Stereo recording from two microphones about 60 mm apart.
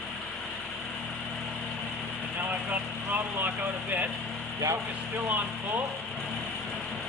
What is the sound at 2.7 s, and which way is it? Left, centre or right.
Speech, right.